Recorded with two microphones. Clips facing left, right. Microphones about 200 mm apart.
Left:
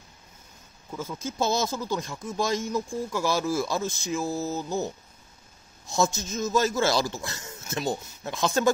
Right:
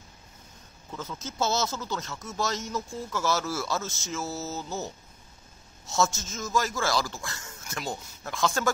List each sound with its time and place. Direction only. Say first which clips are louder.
0.9 s speech: left 3 dB; 10° left (ahead or behind)